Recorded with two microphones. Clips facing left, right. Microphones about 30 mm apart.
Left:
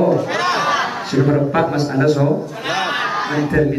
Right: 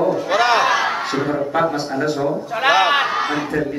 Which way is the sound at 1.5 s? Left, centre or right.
Centre.